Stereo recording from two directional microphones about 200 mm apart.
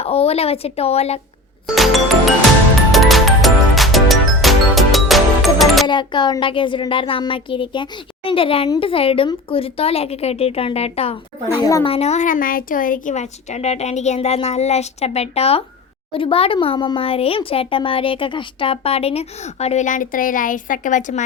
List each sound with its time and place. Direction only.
0.0 s a woman's voice: 30° left (ahead or behind)
1.6 s music: centre (ahead or behind)
5.9 s a woman's voice: 25° left (ahead or behind); by 21.2 s 40° left (ahead or behind)